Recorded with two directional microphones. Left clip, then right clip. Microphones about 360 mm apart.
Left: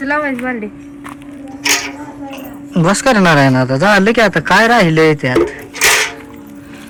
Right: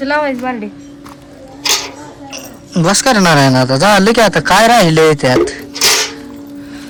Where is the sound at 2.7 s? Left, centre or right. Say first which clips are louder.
Right 1 dB; centre.